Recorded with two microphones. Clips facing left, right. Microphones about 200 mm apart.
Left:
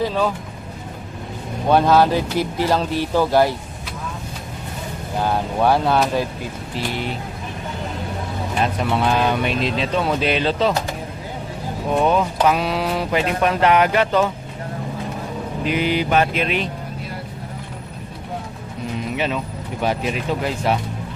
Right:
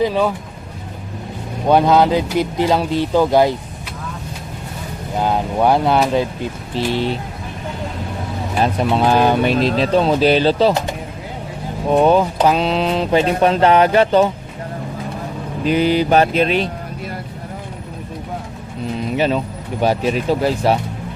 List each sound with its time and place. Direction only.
1.7 s speech: 15° right (ahead or behind)
5.2 s speech: 15° right (ahead or behind)
6.7 s speech: 30° right (ahead or behind)
8.6 s speech: 35° right (ahead or behind)
11.9 s speech: 35° right (ahead or behind)
15.6 s speech: 35° right (ahead or behind)
19.1 s speech: 35° right (ahead or behind)